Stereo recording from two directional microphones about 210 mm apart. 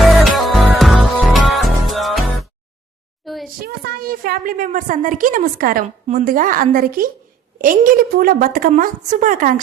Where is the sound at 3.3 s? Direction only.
Centre (ahead or behind).